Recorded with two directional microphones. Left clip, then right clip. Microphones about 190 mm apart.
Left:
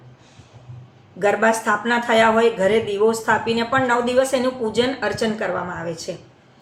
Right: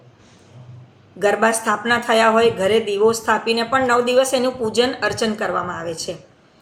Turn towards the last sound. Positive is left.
turn(degrees=-15)  # may be behind; listen again after turning